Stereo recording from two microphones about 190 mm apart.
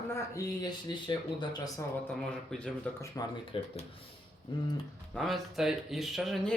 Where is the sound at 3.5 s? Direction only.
30° left (ahead or behind).